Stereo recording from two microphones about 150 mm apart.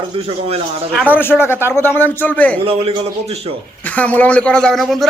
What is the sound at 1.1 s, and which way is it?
Speech, 15° left (ahead or behind).